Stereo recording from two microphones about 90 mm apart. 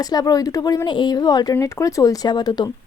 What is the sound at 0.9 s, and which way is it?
Speech, 55° left (ahead or behind).